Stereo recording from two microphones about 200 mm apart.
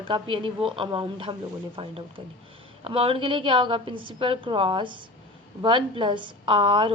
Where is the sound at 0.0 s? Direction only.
25° right (ahead or behind).